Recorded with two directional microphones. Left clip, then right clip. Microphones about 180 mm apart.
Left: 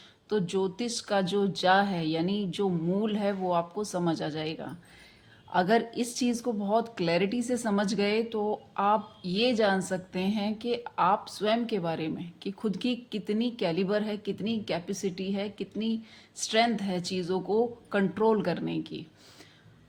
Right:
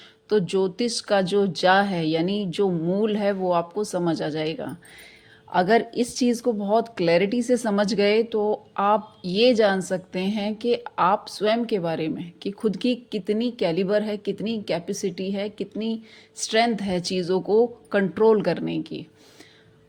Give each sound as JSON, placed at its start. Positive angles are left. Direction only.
{"t": 0.3, "sound": "speech", "side_deg": -35}